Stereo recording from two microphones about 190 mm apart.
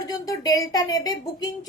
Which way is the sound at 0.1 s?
20° left (ahead or behind).